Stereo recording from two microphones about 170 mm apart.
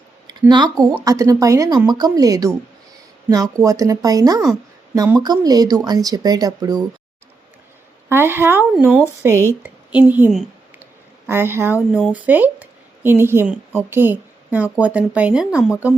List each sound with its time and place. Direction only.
0.3 s speech: 25° right (ahead or behind)
8.1 s a woman's voice: 15° right (ahead or behind)